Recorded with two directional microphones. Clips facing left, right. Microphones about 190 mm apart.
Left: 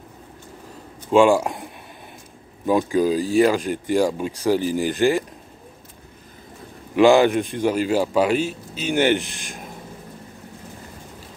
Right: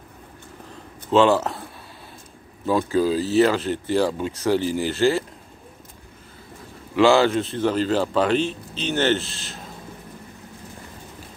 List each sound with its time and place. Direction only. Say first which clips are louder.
1.1 s a man's voice: left 2 dB; 10° left (ahead or behind)
7.0 s a man's voice: left 2 dB; 15° left (ahead or behind)